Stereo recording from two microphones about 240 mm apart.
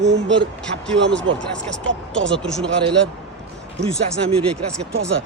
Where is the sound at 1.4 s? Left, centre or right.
Centre.